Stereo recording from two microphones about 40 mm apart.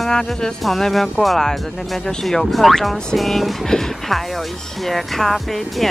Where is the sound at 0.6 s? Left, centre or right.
Centre.